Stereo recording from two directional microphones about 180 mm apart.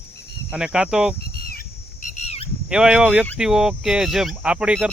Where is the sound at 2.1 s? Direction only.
35° left (ahead or behind).